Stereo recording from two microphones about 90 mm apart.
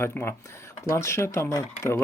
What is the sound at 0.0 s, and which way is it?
Speech, 25° left (ahead or behind).